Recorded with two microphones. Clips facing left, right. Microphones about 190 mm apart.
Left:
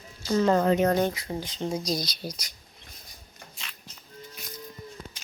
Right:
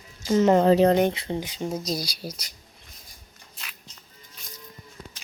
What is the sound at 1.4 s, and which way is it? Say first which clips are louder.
Speech: right 1 dB; 10° right (ahead or behind).